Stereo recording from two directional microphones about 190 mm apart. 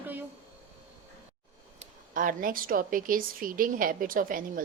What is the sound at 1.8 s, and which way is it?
A woman's voice, 45° right (ahead or behind).